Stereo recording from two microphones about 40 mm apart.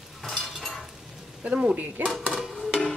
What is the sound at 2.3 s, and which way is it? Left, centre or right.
Music, centre.